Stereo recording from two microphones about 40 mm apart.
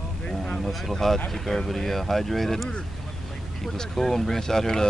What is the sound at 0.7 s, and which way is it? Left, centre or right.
Speech, centre.